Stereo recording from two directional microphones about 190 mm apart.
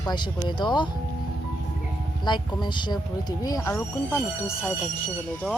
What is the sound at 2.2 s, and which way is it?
Speech, 25° left (ahead or behind).